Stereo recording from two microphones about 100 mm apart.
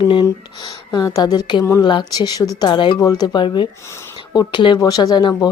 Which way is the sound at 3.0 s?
40° left (ahead or behind).